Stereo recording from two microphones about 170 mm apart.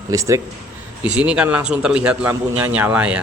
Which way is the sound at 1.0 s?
5° right (ahead or behind).